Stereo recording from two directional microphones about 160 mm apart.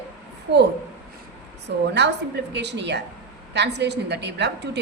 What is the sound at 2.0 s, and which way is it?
A woman's voice, 90° right.